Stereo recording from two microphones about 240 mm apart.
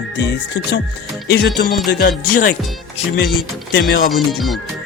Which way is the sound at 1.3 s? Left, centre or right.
Left.